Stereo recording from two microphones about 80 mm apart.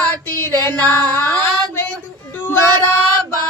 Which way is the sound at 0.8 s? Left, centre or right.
Left.